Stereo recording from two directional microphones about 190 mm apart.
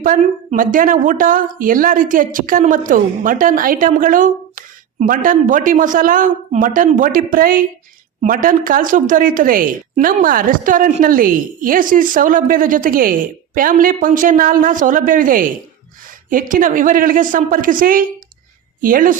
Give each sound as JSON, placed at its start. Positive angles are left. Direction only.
{"t": 0.0, "sound": "a woman's voice", "side_deg": -45}